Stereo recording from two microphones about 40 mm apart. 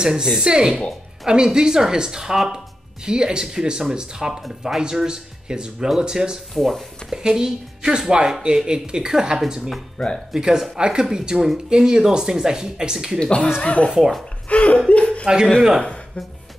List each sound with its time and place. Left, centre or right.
0.0 s speech: centre
4.3 s speech: centre
6.5 s speech: centre
7.1 s speech: centre
10.0 s speech: centre
10.3 s speech: centre
13.2 s speech: left
14.9 s chuckle: left